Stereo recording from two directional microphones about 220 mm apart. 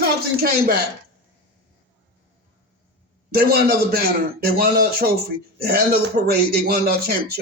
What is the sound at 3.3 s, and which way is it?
A man's voice, 45° right (ahead or behind).